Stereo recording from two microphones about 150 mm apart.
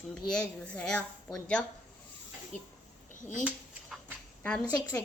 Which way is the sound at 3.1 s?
55° left (ahead or behind).